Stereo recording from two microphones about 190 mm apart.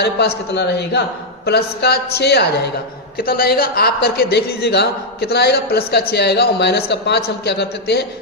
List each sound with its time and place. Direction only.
0.0 s speech: 60° left (ahead or behind)